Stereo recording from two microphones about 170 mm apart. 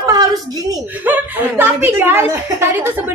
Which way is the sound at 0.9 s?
10° right (ahead or behind).